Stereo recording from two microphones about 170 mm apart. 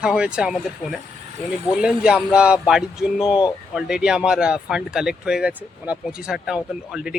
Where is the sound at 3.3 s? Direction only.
25° left (ahead or behind).